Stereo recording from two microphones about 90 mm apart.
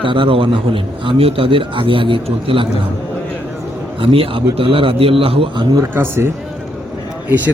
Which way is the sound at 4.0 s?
90° right.